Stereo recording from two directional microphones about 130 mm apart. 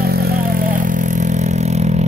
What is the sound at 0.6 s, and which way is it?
Vehicle, 90° right.